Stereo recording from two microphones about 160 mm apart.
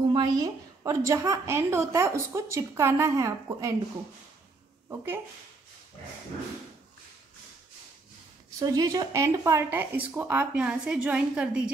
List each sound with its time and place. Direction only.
0.1 s a woman's voice: 25° right (ahead or behind)
4.8 s speech: 15° right (ahead or behind)
8.5 s speech: 20° right (ahead or behind); by 11.7 s 5° right (ahead or behind)